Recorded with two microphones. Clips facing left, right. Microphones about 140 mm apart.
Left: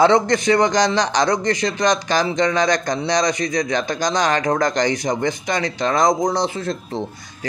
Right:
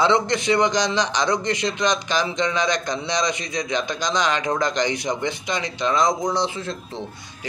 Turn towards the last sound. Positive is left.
turn(degrees=40)  # may be behind; listen again after turning